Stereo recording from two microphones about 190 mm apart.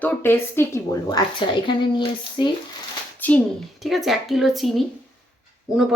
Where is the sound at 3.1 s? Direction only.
10° left (ahead or behind).